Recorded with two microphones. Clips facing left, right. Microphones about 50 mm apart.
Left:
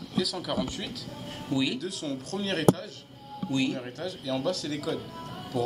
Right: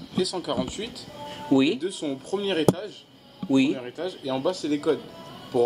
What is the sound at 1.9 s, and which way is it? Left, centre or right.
Speech, centre.